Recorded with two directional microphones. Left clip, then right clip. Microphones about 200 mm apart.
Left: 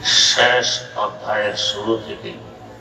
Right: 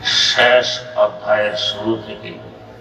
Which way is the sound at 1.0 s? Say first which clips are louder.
Right 7 dB; 20° right (ahead or behind).